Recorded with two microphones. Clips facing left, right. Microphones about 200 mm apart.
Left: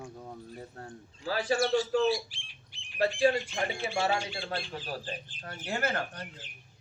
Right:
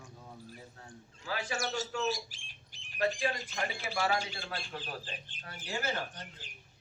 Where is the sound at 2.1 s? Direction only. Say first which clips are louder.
Left 6 dB; 45° right (ahead or behind).